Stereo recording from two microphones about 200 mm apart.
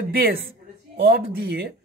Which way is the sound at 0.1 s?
45° right (ahead or behind).